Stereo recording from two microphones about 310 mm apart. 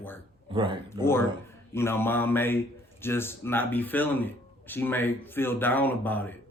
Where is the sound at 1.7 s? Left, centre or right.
Centre.